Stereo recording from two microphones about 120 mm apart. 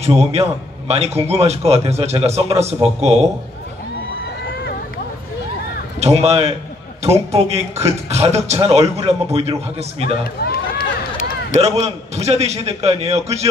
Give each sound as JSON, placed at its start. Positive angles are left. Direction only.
{"t": 0.0, "sound": "a man's voice", "side_deg": -60}
{"t": 5.9, "sound": "a man's voice", "side_deg": -65}
{"t": 11.6, "sound": "a man's voice", "side_deg": -60}